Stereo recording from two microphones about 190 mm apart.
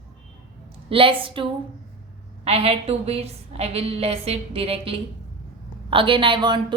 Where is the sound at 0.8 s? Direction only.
30° right (ahead or behind).